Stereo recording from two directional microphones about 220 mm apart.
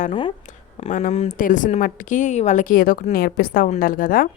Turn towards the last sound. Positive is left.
turn(degrees=40)  # may be behind; listen again after turning